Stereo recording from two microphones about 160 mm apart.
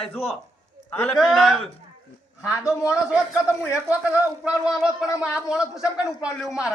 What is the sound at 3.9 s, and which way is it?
Speech, 10° right (ahead or behind).